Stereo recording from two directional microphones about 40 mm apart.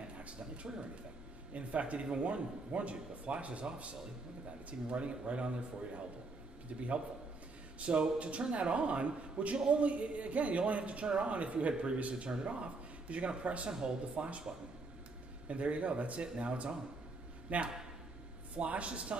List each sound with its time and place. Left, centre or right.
1.5 s a man's voice: right
13.7 s speech: centre
14.1 s speech: right
15.4 s speech: right